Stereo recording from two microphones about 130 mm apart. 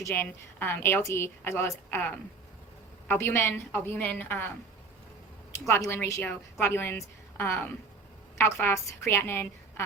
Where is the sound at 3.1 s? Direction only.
20° left (ahead or behind).